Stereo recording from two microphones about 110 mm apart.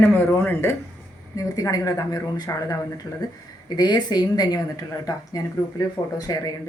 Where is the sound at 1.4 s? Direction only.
35° left (ahead or behind).